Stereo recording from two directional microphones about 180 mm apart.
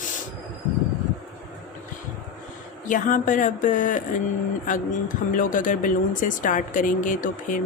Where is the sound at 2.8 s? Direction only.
45° left (ahead or behind).